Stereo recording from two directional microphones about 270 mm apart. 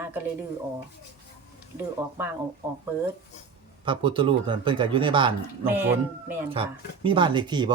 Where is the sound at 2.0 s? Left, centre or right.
Centre.